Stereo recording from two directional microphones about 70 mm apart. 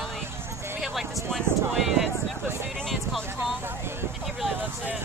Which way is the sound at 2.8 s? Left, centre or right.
Centre.